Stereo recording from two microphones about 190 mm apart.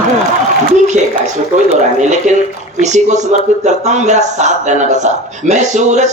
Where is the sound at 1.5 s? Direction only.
40° right (ahead or behind).